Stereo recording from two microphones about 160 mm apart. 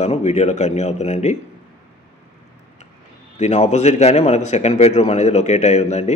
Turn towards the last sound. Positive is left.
turn(degrees=45)  # may be behind; listen again after turning